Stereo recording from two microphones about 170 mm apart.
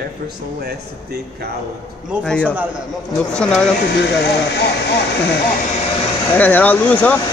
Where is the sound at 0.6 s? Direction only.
70° right (ahead or behind).